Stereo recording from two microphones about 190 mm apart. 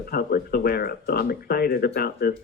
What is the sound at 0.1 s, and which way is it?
A man's voice, 50° left (ahead or behind).